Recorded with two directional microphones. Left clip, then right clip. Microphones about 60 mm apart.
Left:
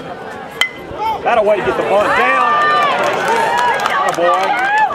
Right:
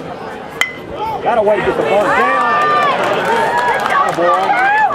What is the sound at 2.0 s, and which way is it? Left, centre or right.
Speech, left.